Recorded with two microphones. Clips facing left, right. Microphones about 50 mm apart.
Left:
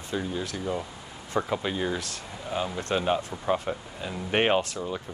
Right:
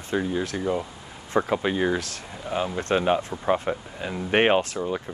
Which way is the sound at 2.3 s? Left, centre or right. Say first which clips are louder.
Right 3 dB; centre.